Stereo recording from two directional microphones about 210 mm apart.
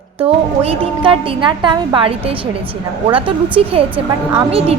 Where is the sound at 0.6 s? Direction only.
25° right (ahead or behind).